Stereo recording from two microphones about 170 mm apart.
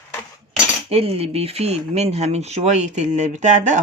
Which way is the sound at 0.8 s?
35° right (ahead or behind).